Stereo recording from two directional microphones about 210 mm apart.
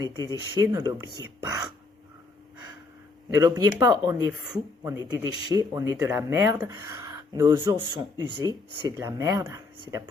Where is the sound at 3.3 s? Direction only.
15° right (ahead or behind).